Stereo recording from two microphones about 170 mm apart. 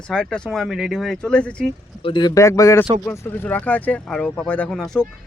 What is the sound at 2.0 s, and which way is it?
Speech, 25° left (ahead or behind).